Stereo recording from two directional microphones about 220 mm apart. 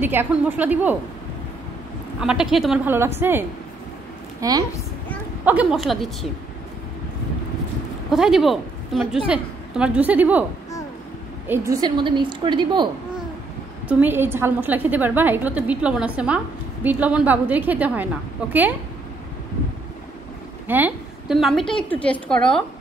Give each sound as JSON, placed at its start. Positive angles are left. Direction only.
{"t": 0.0, "sound": "a woman's voice", "side_deg": -10}
{"t": 2.1, "sound": "a woman's voice", "side_deg": -5}
{"t": 8.1, "sound": "a woman's voice", "side_deg": 0}
{"t": 11.4, "sound": "a woman's voice", "side_deg": -10}
{"t": 13.8, "sound": "a woman's voice", "side_deg": -5}
{"t": 20.6, "sound": "a woman's voice", "side_deg": -10}